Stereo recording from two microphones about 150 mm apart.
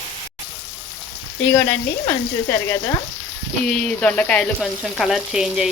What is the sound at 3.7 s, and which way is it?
Speech, 10° left (ahead or behind).